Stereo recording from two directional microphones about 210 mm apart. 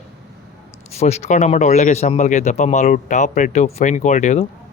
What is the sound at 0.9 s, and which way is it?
Speech, 30° left (ahead or behind).